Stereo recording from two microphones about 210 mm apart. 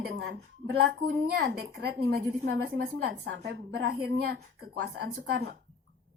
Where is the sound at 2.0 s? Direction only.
50° right (ahead or behind).